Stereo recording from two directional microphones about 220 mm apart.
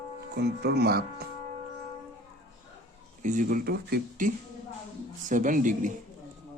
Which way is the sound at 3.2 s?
35° right (ahead or behind).